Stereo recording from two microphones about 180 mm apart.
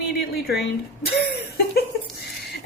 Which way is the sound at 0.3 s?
60° left (ahead or behind).